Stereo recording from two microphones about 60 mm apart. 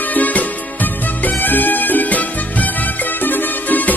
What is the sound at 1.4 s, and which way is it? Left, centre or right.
Music, left.